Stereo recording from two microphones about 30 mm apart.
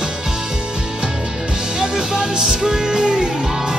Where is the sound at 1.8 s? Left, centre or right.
Right.